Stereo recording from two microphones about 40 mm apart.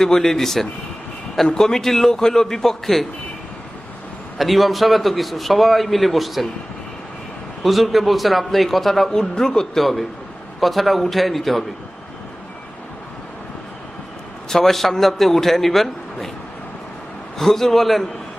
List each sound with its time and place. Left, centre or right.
0.0 s a man's voice: centre
4.4 s a man's voice: centre
7.6 s a man's voice: centre
9.1 s a man's voice: centre
9.8 s a man's voice: centre
14.5 s a man's voice: centre
17.3 s a man's voice: centre